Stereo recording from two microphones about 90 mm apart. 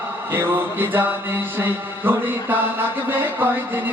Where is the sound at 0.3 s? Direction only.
25° right (ahead or behind).